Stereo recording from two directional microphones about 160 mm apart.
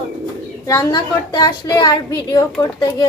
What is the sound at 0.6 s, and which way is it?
A woman's voice, 25° left (ahead or behind).